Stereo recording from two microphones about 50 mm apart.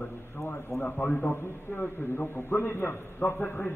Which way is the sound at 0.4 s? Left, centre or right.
Left.